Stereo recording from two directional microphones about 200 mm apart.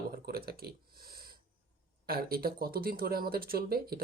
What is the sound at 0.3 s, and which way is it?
Speech, 50° right (ahead or behind).